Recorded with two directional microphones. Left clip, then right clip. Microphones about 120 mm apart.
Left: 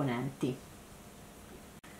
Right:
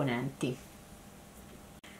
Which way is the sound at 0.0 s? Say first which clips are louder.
Right 1 dB; 20° right (ahead or behind).